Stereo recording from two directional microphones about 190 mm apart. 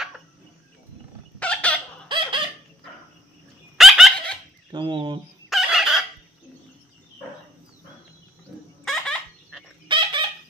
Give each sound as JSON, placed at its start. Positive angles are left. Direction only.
{"t": 1.4, "sound": "fowl", "side_deg": 5}
{"t": 2.0, "sound": "squeak", "side_deg": -25}
{"t": 3.7, "sound": "dog", "side_deg": 0}
{"t": 4.7, "sound": "speech", "side_deg": -25}
{"t": 5.5, "sound": "chicken", "side_deg": 0}
{"t": 8.8, "sound": "turkey", "side_deg": 0}
{"t": 9.8, "sound": "chicken", "side_deg": -25}